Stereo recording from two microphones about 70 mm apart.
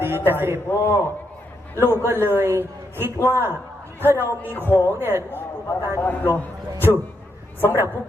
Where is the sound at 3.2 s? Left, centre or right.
Left.